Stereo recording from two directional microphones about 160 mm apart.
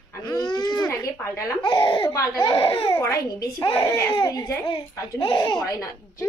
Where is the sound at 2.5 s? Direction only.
35° left (ahead or behind).